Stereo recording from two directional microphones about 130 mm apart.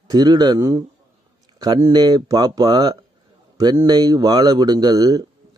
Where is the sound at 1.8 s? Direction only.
30° right (ahead or behind).